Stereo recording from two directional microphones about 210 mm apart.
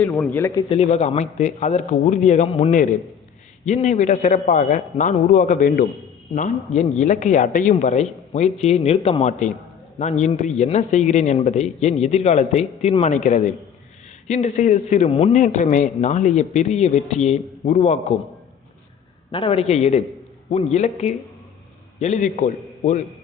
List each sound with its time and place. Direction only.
0.0 s a man's voice: 10° left (ahead or behind)
0.7 s speech: 30° left (ahead or behind)
19.3 s a man's voice: 25° left (ahead or behind)